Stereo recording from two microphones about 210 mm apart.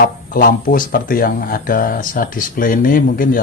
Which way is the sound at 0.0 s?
45° left (ahead or behind).